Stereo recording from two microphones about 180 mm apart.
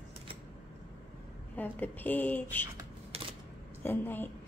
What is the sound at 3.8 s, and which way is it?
Speech, 10° left (ahead or behind).